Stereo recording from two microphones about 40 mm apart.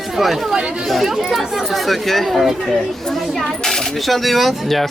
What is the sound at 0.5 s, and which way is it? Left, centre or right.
Speech, right.